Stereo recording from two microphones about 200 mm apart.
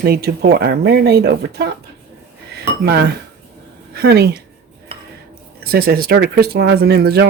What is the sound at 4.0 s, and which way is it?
Speech, 55° right (ahead or behind).